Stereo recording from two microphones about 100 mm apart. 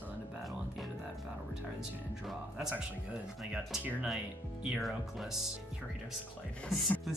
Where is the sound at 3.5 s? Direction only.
10° right (ahead or behind).